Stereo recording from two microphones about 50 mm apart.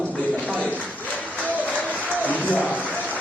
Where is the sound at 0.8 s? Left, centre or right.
Left.